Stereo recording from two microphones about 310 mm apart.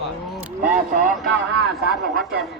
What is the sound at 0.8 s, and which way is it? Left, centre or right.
Speech, right.